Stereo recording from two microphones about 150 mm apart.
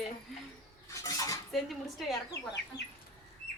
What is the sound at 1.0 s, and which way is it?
Cutlery, 20° left (ahead or behind).